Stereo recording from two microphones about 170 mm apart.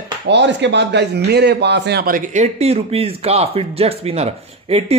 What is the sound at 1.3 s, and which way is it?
Speech, 75° right (ahead or behind).